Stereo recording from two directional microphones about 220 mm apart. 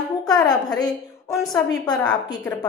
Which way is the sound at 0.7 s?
15° left (ahead or behind).